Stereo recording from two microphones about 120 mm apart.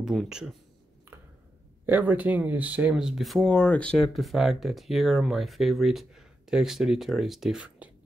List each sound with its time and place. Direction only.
0.0 s speech: centre (ahead or behind)
1.9 s speech: 15° right (ahead or behind); by 3.9 s 10° left (ahead or behind)
4.0 s speech: centre (ahead or behind)